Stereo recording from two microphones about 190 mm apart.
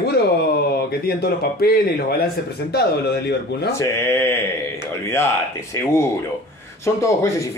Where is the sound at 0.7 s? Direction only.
55° left (ahead or behind).